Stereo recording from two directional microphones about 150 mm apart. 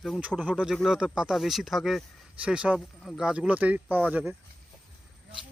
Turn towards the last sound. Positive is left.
turn(degrees=-10)  # may be behind; listen again after turning